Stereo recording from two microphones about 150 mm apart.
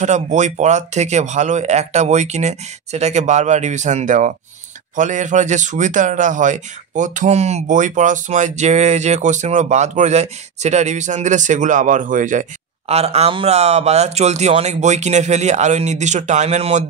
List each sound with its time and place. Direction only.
0.0 s a man's voice: 50° right (ahead or behind)
12.8 s speech: 45° right (ahead or behind)